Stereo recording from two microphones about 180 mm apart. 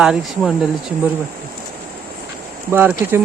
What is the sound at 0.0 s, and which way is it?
Speech, 5° right (ahead or behind).